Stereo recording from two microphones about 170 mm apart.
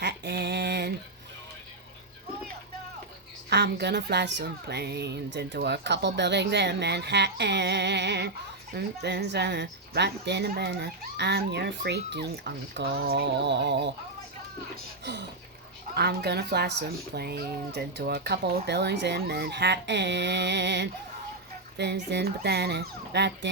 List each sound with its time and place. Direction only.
0.0 s mantra: 80° right
3.5 s a woman's voice: 80° right
15.0 s speech: 90° right
16.0 s a woman's voice: 70° right (ahead or behind)